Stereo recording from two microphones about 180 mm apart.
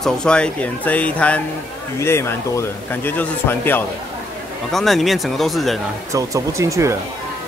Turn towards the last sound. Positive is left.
turn(degrees=-15)  # may be behind; listen again after turning